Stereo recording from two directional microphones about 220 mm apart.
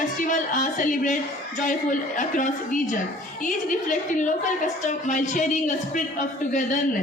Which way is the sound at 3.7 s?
35° left (ahead or behind).